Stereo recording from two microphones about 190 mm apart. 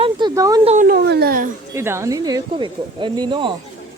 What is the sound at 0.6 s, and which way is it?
Speech, 45° right (ahead or behind).